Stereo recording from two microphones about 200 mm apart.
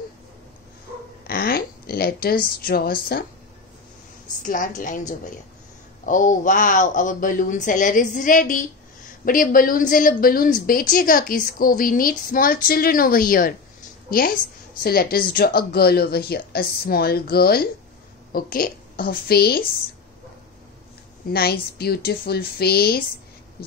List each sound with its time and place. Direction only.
1.2 s speech: 50° left (ahead or behind)
4.5 s a woman's voice: 40° left (ahead or behind)
21.3 s a woman's voice: 50° left (ahead or behind)